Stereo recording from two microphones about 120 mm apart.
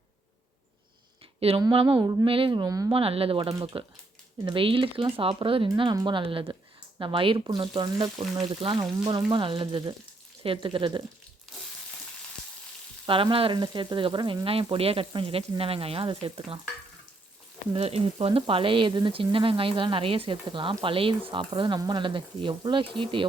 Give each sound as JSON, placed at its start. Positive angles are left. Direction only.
{"t": 1.4, "sound": "speech", "side_deg": -55}
{"t": 2.9, "sound": "speech", "side_deg": -55}
{"t": 13.3, "sound": "speech", "side_deg": -45}
{"t": 17.7, "sound": "speech", "side_deg": -55}